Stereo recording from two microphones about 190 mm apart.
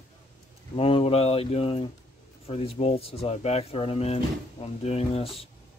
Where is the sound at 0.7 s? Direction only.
30° left (ahead or behind).